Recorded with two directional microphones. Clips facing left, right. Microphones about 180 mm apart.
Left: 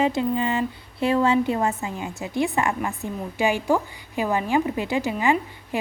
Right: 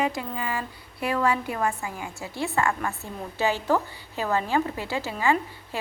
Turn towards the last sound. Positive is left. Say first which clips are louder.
# left 2 dB
turn(degrees=15)  # may be behind; listen again after turning